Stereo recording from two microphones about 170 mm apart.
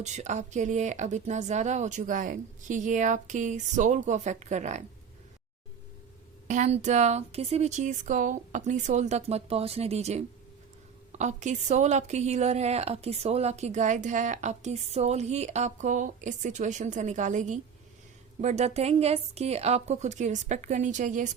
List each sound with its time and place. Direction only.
0.0 s a woman's voice: 45° right (ahead or behind)
6.5 s a woman's voice: 40° right (ahead or behind)